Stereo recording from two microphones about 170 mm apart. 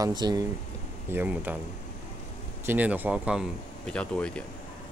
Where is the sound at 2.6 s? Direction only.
10° right (ahead or behind).